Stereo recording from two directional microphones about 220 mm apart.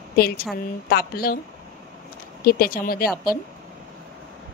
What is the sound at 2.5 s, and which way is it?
Speech, 40° left (ahead or behind).